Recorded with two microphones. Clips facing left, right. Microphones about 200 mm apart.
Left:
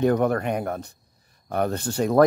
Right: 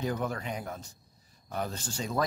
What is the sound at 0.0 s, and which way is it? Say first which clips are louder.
Speech: left 12 dB; 60° left (ahead or behind).